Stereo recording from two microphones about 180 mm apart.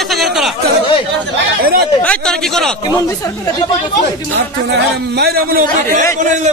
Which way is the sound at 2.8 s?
20° left (ahead or behind).